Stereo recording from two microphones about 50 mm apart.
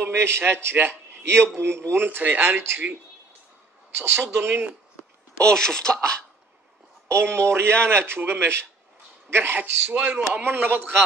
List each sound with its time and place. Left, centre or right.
0.0 s a man's voice: right
2.0 s speech: right
3.9 s speech: right
5.4 s speech: centre
7.1 s speech: right
9.6 s speech: right